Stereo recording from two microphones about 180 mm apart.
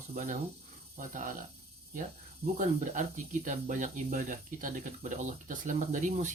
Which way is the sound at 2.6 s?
45° right (ahead or behind).